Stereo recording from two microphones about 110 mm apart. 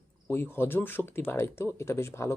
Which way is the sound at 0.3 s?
20° left (ahead or behind).